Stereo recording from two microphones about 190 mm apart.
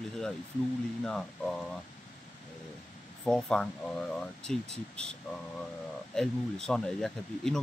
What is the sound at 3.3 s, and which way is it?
Speech, 5° left (ahead or behind).